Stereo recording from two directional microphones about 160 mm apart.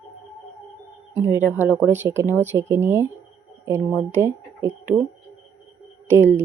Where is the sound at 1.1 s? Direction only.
15° right (ahead or behind).